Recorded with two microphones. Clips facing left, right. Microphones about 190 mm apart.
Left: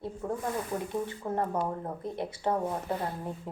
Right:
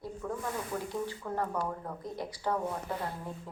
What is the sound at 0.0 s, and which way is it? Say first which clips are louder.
Speech: left 3 dB; 25° left (ahead or behind).